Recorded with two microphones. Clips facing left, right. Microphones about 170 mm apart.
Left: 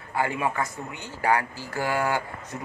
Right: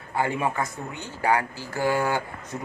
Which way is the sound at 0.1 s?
20° right (ahead or behind).